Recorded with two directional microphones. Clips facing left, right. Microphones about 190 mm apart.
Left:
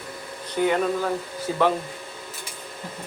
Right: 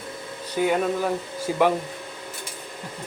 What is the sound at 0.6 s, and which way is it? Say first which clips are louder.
Speech: even; 10° right (ahead or behind).